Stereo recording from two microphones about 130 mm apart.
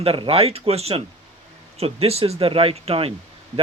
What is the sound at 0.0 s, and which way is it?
Speech, 50° right (ahead or behind).